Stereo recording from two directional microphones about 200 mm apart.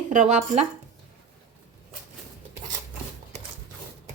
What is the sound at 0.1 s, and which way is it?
Speech, 35° right (ahead or behind).